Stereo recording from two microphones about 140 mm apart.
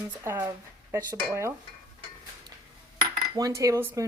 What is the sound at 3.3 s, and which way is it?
Speech, 25° right (ahead or behind).